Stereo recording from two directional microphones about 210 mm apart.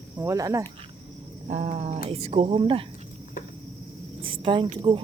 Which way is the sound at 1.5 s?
30° right (ahead or behind).